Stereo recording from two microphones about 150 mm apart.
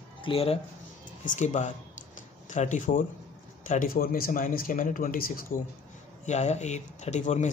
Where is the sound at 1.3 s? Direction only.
55° left (ahead or behind).